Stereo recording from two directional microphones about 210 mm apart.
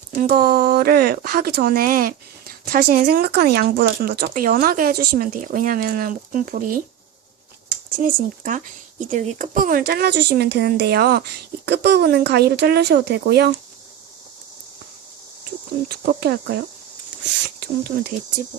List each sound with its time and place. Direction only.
0.2 s speech: 40° right (ahead or behind)
8.0 s speech: 40° right (ahead or behind)
15.9 s speech: 50° right (ahead or behind)